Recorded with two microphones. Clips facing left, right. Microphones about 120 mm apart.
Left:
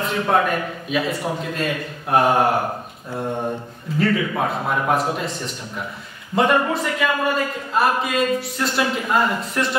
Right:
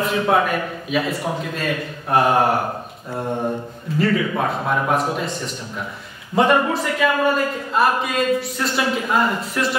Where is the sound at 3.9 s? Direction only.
Centre (ahead or behind).